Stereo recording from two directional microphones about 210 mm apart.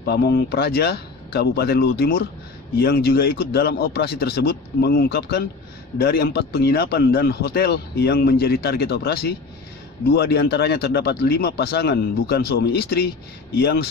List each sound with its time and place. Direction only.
0.0 s speech: 50° left (ahead or behind)